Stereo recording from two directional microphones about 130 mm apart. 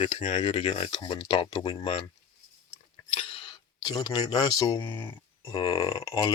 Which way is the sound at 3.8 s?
30° left (ahead or behind).